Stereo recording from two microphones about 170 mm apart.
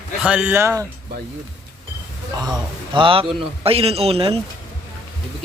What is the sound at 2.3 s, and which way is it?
Speech, 25° right (ahead or behind).